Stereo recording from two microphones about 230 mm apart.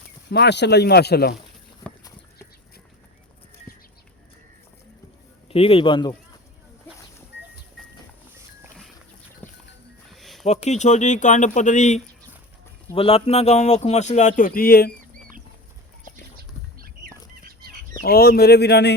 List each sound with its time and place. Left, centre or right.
0.3 s speech: left
5.5 s speech: left
9.4 s a sound: centre
10.4 s speech: left
18.0 s speech: left